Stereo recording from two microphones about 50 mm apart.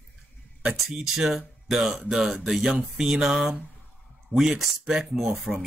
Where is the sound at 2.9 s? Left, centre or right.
Centre.